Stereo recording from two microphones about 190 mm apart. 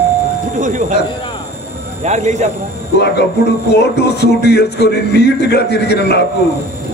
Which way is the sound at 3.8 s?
60° left (ahead or behind).